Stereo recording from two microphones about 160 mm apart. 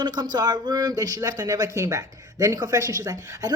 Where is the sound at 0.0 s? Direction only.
25° right (ahead or behind).